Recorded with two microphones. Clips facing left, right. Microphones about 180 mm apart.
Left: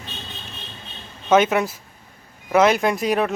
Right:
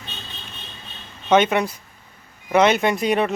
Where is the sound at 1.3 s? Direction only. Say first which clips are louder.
Even; centre (ahead or behind).